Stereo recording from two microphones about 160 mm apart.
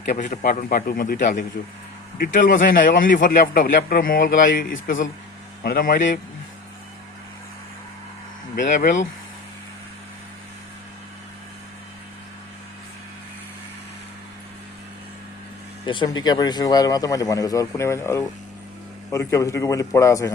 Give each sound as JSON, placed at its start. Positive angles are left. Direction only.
{"t": 0.2, "sound": "a man's voice", "side_deg": 55}
{"t": 8.5, "sound": "a man's voice", "side_deg": 50}
{"t": 15.9, "sound": "speech", "side_deg": 30}